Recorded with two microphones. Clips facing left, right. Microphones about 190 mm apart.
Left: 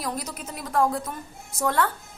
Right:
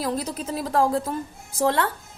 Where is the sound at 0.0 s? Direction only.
30° right (ahead or behind).